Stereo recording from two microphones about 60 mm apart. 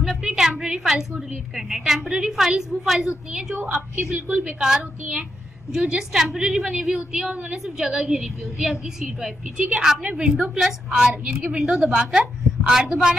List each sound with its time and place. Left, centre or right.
0.2 s a woman's voice: centre
4.3 s a woman's voice: right
4.6 s a woman's voice: centre